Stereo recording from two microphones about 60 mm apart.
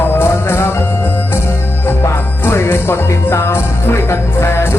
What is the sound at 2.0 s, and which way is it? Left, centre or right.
Music, left.